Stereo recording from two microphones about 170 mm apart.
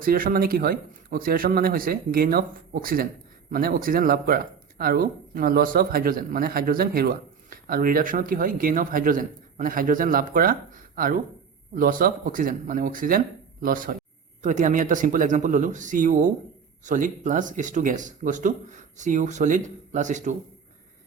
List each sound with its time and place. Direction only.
0.0 s speech: 60° right (ahead or behind)